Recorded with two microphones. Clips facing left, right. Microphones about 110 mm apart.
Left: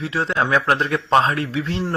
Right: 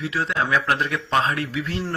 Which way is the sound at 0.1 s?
30° left (ahead or behind).